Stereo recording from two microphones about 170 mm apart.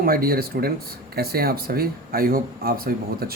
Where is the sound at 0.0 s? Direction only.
60° right (ahead or behind).